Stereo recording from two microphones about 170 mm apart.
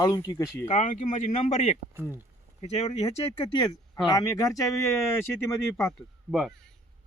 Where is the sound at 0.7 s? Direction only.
45° left (ahead or behind); by 5.9 s 15° left (ahead or behind).